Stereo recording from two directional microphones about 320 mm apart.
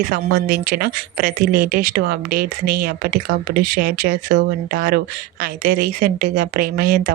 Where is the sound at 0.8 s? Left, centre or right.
Right.